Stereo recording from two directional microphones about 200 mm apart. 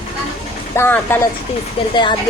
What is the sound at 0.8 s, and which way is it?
Speech, 10° left (ahead or behind).